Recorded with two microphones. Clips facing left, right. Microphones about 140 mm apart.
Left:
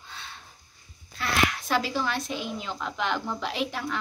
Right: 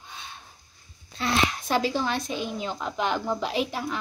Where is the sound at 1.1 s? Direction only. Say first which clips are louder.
Right 1 dB; 25° right (ahead or behind).